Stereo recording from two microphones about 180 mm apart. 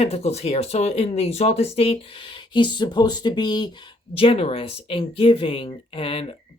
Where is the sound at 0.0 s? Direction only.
35° left (ahead or behind).